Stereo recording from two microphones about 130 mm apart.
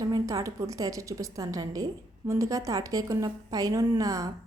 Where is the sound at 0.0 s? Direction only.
25° right (ahead or behind).